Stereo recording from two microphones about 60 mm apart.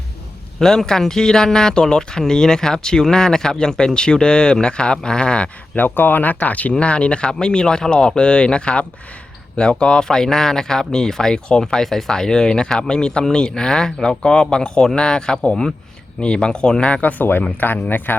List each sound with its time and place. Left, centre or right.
0.6 s speech: centre
5.7 s speech: left